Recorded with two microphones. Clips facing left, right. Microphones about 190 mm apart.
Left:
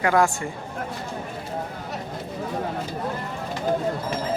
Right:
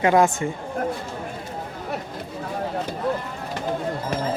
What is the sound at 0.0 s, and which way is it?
Speech, 20° right (ahead or behind).